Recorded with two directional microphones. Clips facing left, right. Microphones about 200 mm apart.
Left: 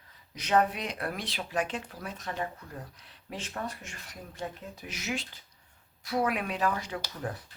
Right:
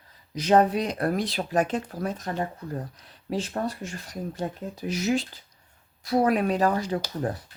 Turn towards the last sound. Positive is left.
turn(degrees=-35)  # may be behind; listen again after turning